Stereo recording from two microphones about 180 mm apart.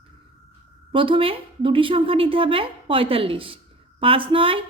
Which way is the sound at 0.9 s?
30° right (ahead or behind).